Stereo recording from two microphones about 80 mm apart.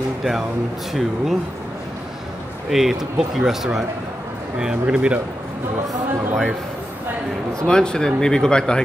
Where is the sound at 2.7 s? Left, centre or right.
Centre.